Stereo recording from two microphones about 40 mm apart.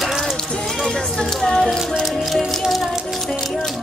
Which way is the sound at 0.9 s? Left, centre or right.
Centre.